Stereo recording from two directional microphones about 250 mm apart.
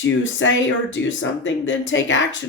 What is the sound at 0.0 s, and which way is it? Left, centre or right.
Speech, left.